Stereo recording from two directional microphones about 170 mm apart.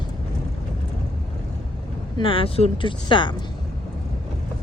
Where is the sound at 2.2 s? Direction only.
30° left (ahead or behind).